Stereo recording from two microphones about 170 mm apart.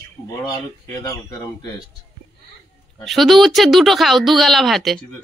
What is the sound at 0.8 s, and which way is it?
Speech, 20° left (ahead or behind).